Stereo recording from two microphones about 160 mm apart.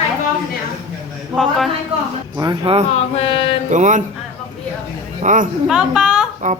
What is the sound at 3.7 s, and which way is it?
Speech, 50° right (ahead or behind).